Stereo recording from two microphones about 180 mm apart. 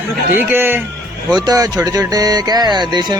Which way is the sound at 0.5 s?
10° right (ahead or behind).